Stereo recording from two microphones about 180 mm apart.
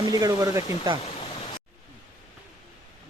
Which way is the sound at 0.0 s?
20° right (ahead or behind).